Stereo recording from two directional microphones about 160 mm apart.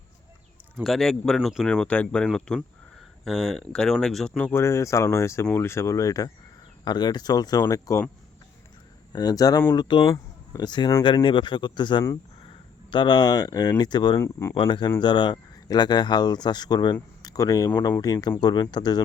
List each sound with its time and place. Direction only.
0.9 s speech: 5° left (ahead or behind); by 8.0 s 20° left (ahead or behind)
9.1 s speech: 25° left (ahead or behind)
14.5 s speech: 30° left (ahead or behind)